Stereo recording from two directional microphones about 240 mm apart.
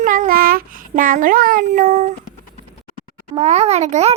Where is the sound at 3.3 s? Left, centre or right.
Right.